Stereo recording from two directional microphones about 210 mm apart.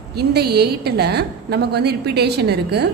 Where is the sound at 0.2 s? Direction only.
50° right (ahead or behind).